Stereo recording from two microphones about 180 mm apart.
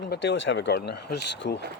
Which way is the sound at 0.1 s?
80° left.